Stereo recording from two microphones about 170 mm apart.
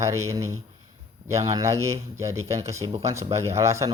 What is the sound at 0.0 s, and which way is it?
Speech, 15° right (ahead or behind).